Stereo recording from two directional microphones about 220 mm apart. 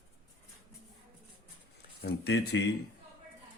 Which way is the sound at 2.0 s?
45° left (ahead or behind).